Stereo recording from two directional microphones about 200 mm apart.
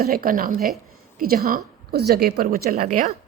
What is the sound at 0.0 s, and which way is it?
A woman's voice, 50° right (ahead or behind).